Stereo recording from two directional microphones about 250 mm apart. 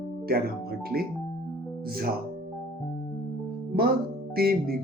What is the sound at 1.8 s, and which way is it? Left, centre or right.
Speech, right.